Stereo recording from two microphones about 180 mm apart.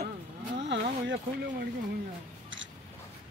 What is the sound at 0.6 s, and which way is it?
Speech, 80° right.